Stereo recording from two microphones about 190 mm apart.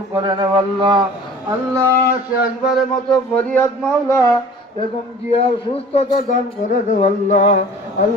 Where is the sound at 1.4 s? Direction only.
15° right (ahead or behind).